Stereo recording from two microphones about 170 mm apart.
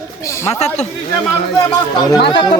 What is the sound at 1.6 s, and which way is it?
Speech, 20° left (ahead or behind).